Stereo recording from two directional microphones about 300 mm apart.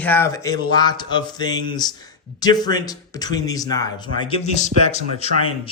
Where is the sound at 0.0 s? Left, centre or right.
Centre.